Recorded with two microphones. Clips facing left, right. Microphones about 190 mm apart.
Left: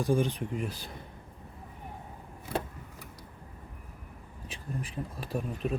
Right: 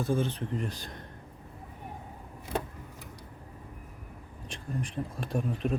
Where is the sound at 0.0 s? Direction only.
15° left (ahead or behind).